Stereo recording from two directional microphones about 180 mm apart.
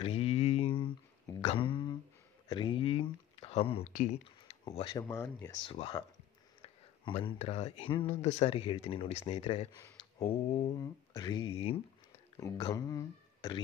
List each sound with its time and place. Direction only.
0.0 s mantra: 35° left (ahead or behind)
1.4 s a sound: 30° left (ahead or behind)
3.9 s speech: 40° left (ahead or behind)
4.7 s speech: 25° left (ahead or behind)
5.0 s speech: 10° left (ahead or behind)
5.7 s speech: 25° left (ahead or behind)
10.8 s speech: 25° left (ahead or behind)
12.4 s speech: 20° left (ahead or behind)